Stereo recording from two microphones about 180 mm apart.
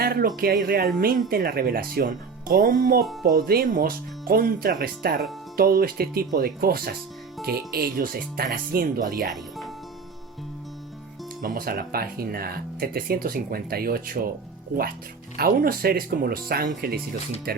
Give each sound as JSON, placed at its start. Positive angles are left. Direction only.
{"t": 0.0, "sound": "speech", "side_deg": -60}
{"t": 9.3, "sound": "music", "side_deg": 0}
{"t": 11.4, "sound": "speech", "side_deg": -55}
{"t": 15.4, "sound": "speech", "side_deg": -55}